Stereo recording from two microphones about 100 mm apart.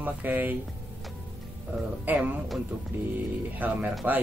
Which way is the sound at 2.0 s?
15° right (ahead or behind).